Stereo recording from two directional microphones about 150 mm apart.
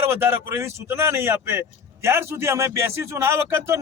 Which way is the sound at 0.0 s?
15° right (ahead or behind).